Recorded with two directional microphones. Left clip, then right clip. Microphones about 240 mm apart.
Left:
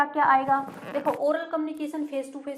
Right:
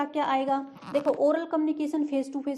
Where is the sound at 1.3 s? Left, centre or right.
Right.